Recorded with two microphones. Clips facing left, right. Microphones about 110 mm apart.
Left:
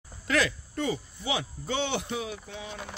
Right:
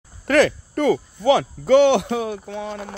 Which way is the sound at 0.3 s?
60° right (ahead or behind).